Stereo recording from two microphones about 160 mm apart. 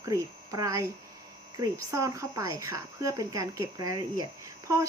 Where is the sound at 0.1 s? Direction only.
20° right (ahead or behind).